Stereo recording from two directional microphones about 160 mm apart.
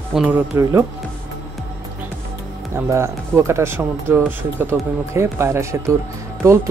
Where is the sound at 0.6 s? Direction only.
20° right (ahead or behind).